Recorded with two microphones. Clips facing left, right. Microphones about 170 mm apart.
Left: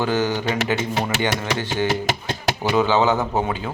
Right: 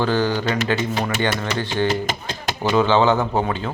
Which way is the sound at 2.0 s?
80° left.